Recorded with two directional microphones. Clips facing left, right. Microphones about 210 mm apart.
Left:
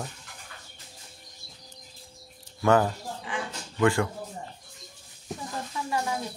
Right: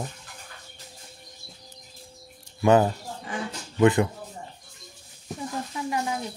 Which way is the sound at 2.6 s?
20° right (ahead or behind).